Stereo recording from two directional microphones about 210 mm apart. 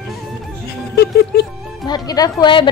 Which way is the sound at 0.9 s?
50° left (ahead or behind).